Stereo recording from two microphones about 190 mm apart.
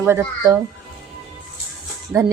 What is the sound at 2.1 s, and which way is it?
Speech, 10° right (ahead or behind).